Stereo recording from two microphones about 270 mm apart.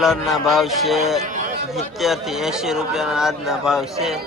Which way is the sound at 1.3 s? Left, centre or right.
Right.